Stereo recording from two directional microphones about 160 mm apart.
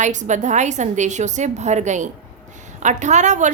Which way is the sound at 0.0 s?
50° right (ahead or behind).